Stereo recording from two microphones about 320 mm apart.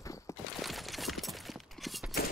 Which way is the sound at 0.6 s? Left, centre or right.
Centre.